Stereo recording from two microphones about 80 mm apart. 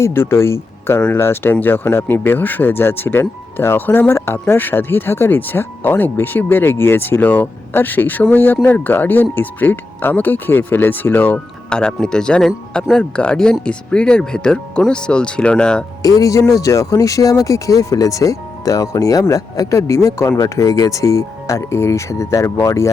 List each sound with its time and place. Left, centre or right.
0.0 s speech: left
11.7 s speech: centre
16.0 s speech: left